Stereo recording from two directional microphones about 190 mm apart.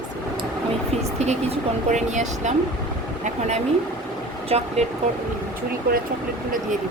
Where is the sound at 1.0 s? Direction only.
35° right (ahead or behind).